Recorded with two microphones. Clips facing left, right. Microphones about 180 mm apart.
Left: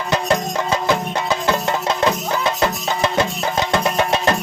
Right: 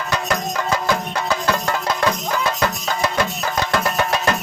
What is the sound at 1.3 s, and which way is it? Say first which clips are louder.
Music: left 1 dB; 25° left (ahead or behind).